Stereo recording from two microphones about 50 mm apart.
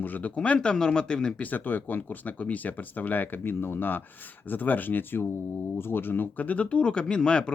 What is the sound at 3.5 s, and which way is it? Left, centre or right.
Speech, left.